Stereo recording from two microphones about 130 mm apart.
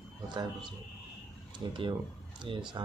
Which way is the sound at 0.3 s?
35° right (ahead or behind).